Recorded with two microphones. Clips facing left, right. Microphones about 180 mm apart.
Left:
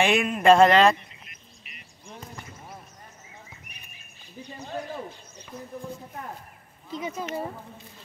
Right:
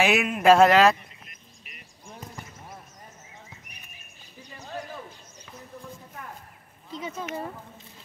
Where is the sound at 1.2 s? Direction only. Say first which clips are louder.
Even; 45° right (ahead or behind).